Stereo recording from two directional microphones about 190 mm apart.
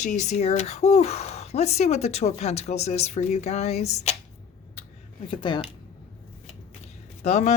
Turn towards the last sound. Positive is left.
turn(degrees=35)  # may be behind; listen again after turning